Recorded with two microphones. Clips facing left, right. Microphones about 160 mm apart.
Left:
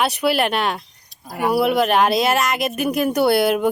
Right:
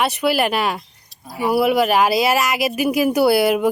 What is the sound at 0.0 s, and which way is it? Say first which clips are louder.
Speech: even; centre (ahead or behind).